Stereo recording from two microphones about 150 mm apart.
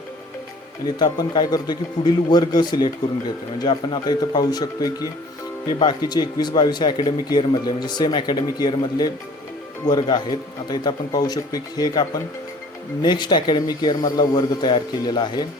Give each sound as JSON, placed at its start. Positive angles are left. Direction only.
{"t": 0.9, "sound": "speech", "side_deg": 30}